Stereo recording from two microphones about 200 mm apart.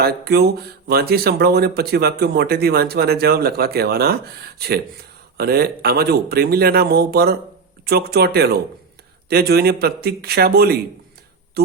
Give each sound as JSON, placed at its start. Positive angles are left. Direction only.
{"t": 0.0, "sound": "speech", "side_deg": -55}